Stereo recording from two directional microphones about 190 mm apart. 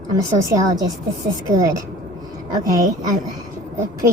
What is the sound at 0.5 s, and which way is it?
Speech, 20° right (ahead or behind).